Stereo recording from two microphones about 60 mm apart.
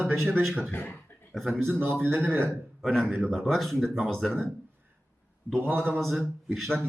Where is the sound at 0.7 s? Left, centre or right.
Left.